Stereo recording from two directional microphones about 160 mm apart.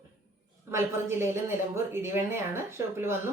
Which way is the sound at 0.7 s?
15° right (ahead or behind).